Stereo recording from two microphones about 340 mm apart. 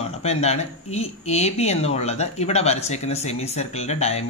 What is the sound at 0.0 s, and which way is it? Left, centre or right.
Speech, centre.